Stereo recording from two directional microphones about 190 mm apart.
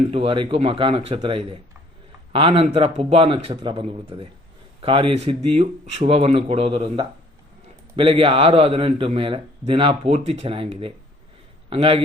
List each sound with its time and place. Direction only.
0.1 s speech: 30° right (ahead or behind)